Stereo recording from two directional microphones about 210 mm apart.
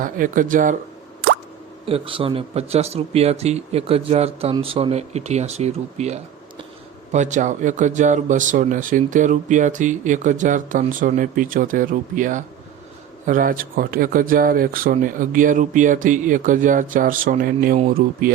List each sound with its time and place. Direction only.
0.0 s speech: 40° right (ahead or behind)
1.9 s speech: 25° right (ahead or behind); by 18.3 s 40° right (ahead or behind)